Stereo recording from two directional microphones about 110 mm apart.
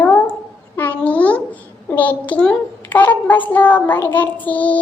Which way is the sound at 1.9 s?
15° left (ahead or behind).